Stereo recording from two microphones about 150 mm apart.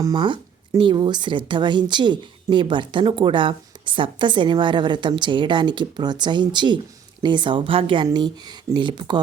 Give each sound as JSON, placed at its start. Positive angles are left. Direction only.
{"t": 0.0, "sound": "a woman's voice", "side_deg": -30}